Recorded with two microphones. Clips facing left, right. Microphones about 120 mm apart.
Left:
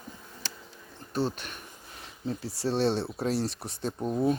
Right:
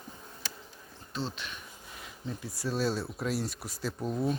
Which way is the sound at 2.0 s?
30° left (ahead or behind).